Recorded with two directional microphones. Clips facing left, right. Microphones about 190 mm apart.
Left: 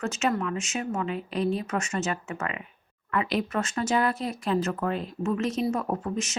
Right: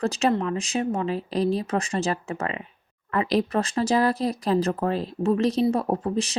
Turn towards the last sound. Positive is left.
turn(degrees=-35)  # may be behind; listen again after turning